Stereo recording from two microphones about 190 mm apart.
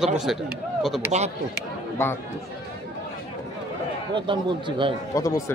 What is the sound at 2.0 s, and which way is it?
Speech, 15° left (ahead or behind).